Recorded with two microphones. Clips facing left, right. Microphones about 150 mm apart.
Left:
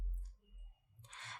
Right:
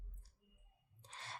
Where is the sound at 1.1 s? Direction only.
35° right (ahead or behind).